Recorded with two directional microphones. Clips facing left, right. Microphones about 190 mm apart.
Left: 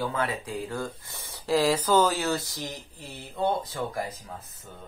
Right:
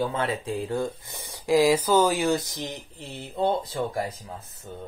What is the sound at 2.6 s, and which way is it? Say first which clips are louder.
Speech: right 2 dB; 30° right (ahead or behind).